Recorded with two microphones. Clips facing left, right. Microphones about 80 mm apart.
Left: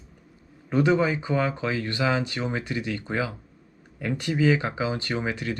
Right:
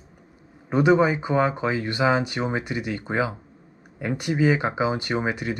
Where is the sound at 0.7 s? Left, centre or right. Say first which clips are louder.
Right 3 dB; centre.